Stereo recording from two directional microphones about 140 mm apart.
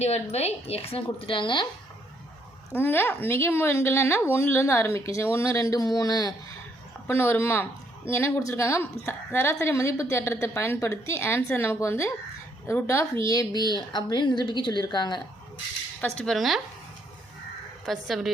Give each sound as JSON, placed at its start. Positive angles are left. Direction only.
{"t": 0.0, "sound": "a woman's voice", "side_deg": 50}
{"t": 2.7, "sound": "a woman's voice", "side_deg": 15}
{"t": 7.1, "sound": "a woman's voice", "side_deg": 15}
{"t": 16.0, "sound": "speech", "side_deg": 5}
{"t": 17.8, "sound": "speech", "side_deg": 0}